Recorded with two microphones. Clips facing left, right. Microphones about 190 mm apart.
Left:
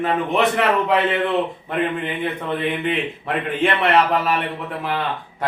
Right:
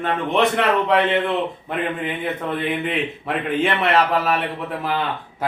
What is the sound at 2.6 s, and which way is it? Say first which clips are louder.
A man's voice: left 2 dB; centre (ahead or behind).